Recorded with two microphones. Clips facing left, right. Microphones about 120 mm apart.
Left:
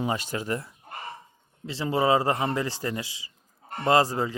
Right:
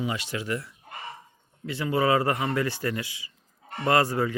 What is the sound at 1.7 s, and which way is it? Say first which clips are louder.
Speech: even; 30° left (ahead or behind).